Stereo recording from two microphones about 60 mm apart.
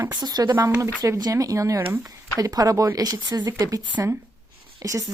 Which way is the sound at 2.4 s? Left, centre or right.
Right.